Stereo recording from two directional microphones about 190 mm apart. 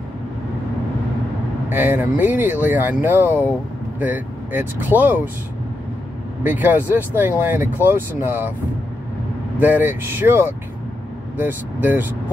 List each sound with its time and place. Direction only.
1.7 s speech: 10° right (ahead or behind)
6.4 s speech: 10° right (ahead or behind)
9.6 s speech: 10° right (ahead or behind)